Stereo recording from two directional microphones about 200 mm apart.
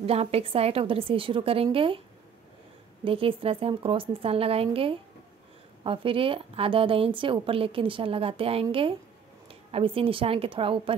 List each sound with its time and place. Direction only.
0.0 s a woman's voice: 30° right (ahead or behind)
3.0 s a woman's voice: 25° right (ahead or behind)